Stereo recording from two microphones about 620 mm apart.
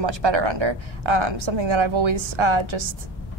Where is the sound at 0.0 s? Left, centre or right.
Right.